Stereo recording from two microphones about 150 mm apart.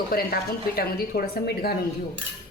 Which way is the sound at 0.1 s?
80° left.